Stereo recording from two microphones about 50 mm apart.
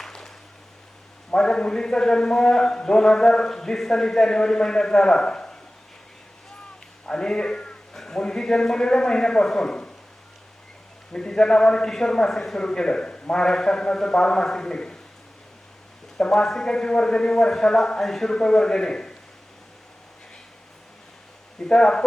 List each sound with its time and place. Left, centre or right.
0.0 s a sound: centre
1.3 s a man's voice: centre
7.1 s a man's voice: centre
11.1 s a man's voice: centre
16.1 s a man's voice: centre
21.6 s a man's voice: centre